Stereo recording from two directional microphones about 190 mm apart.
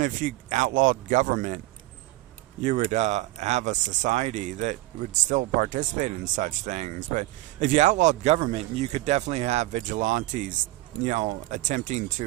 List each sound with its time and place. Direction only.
0.0 s speech: 40° right (ahead or behind)
2.6 s speech: 40° right (ahead or behind)